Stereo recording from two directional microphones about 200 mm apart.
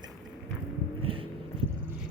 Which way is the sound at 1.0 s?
25° right (ahead or behind).